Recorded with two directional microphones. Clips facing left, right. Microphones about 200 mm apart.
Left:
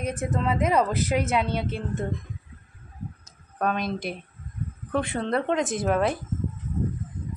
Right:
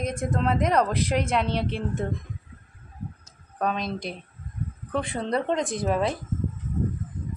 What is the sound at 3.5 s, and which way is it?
A woman's voice, centre (ahead or behind).